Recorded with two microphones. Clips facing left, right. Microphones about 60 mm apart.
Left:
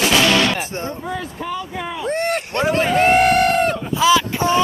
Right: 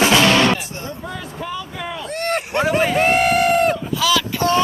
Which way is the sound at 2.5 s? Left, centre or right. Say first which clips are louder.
Even; centre.